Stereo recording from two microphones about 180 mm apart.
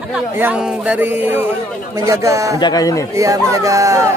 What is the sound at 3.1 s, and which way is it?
Speech, 20° right (ahead or behind).